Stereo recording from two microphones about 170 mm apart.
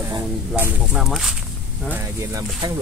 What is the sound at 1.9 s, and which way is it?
Speech, 20° right (ahead or behind).